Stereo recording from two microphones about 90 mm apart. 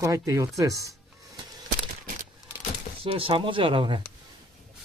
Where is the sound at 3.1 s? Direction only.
85° right.